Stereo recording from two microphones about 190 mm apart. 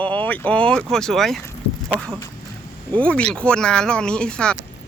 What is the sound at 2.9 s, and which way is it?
Speech, 5° left (ahead or behind).